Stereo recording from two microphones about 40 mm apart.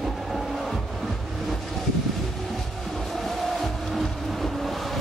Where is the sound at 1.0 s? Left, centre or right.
Centre.